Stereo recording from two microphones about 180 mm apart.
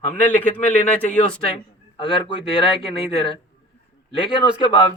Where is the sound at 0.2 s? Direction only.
10° left (ahead or behind).